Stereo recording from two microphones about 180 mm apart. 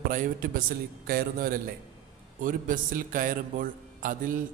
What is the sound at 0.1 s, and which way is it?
A man's voice, 50° right (ahead or behind).